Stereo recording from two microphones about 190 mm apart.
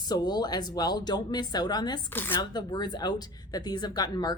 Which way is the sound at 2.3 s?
20° left (ahead or behind).